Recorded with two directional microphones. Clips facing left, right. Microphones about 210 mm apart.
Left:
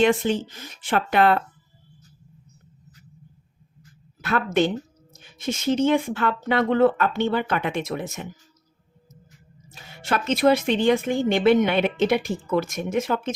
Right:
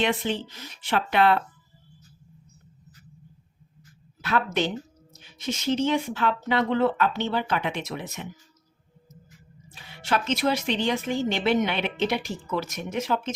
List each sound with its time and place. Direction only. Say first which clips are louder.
0.0 s a woman's voice: left 6 dB; 45° left (ahead or behind)
4.2 s a woman's voice: left 4 dB; 50° left (ahead or behind)
9.7 s a woman's voice: left 1 dB; 45° left (ahead or behind)